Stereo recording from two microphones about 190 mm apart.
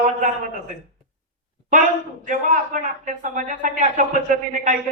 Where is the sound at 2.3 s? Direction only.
40° right (ahead or behind).